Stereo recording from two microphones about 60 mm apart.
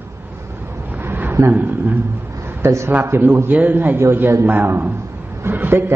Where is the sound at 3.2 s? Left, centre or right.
Right.